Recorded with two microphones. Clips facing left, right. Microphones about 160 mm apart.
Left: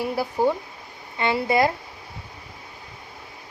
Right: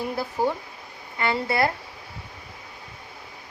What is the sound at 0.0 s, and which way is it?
Speech, 15° left (ahead or behind).